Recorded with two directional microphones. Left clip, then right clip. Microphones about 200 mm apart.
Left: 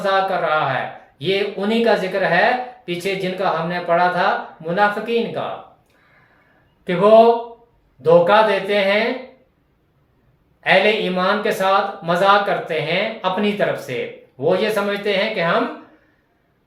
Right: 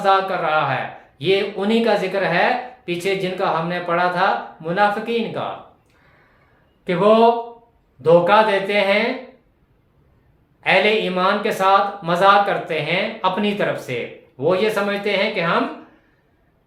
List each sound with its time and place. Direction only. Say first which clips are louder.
0.0 s speech: right 1 dB; 20° right (ahead or behind)
6.8 s speech: left 3 dB; 20° right (ahead or behind)
10.6 s speech: left 1 dB; 20° right (ahead or behind)